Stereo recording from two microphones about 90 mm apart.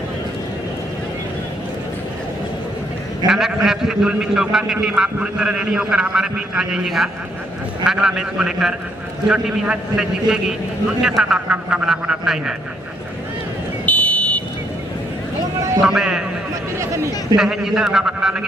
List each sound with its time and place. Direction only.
3.3 s a man's voice: 5° right (ahead or behind)
13.8 s a sound: 15° left (ahead or behind)
15.8 s a man's voice: 5° right (ahead or behind)
17.4 s a man's voice: 5° right (ahead or behind)